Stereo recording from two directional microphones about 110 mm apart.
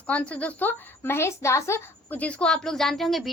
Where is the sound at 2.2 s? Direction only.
10° left (ahead or behind).